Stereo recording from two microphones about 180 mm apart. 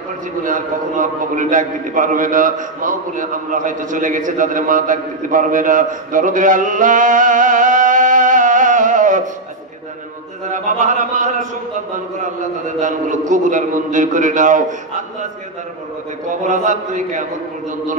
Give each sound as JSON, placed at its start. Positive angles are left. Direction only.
{"t": 0.4, "sound": "a man's voice", "side_deg": -45}
{"t": 10.5, "sound": "a sound", "side_deg": -45}
{"t": 12.2, "sound": "a man's voice", "side_deg": -45}
{"t": 16.4, "sound": "a man's voice", "side_deg": -45}